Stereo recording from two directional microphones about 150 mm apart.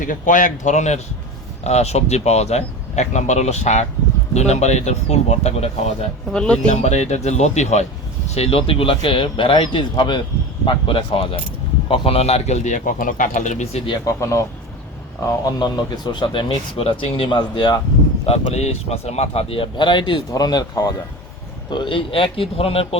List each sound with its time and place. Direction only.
0.0 s speech: 60° left (ahead or behind); by 6.1 s 45° left (ahead or behind)
6.3 s speech: 5° left (ahead or behind)
6.7 s speech: 50° left (ahead or behind)
13.8 s speech: 30° left (ahead or behind)
14.2 s speech: 20° left (ahead or behind)
18.3 s speech: 45° left (ahead or behind)